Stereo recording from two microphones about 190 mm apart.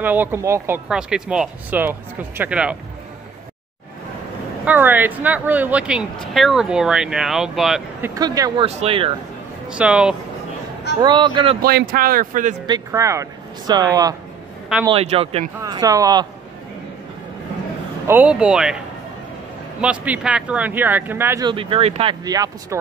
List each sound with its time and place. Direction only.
0.0 s speech: 10° right (ahead or behind)
4.6 s speech: 10° right (ahead or behind)
8.1 s speech: 20° right (ahead or behind)
8.6 s speech: 30° right (ahead or behind)
9.7 s speech: 5° right (ahead or behind)
11.0 s speech: 25° right (ahead or behind)
11.6 s speech: 55° right (ahead or behind)
12.6 s speech: 20° right (ahead or behind)
14.9 s speech: 30° right (ahead or behind)
15.6 s speech: 20° right (ahead or behind)
18.0 s speech: 10° right (ahead or behind)
19.8 s speech: 5° right (ahead or behind)
21.5 s speech: 25° right (ahead or behind)
22.2 s speech: 20° right (ahead or behind)